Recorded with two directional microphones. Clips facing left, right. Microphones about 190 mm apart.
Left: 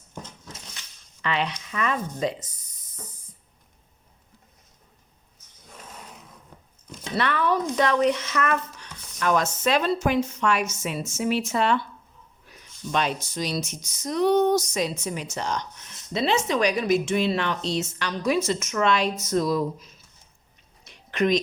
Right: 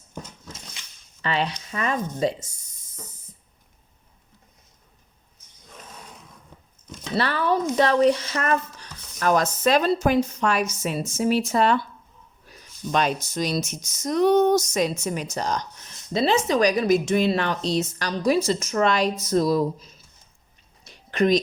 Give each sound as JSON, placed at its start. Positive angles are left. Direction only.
{"t": 1.2, "sound": "a woman's voice", "side_deg": -35}
{"t": 7.2, "sound": "a woman's voice", "side_deg": -30}
{"t": 20.8, "sound": "a sound", "side_deg": -35}